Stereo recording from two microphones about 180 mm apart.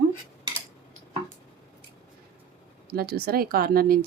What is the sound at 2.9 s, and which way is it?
A woman's voice, 60° right (ahead or behind).